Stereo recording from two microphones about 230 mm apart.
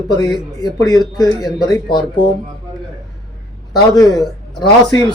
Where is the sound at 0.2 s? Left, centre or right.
Centre.